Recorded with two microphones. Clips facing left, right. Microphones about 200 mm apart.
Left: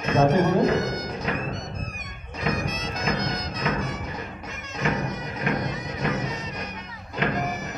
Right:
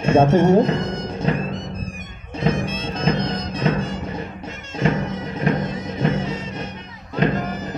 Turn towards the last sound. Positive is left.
turn(degrees=-30)  # may be behind; listen again after turning